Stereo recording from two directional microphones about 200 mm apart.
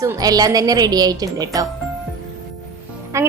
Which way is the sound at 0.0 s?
15° right (ahead or behind).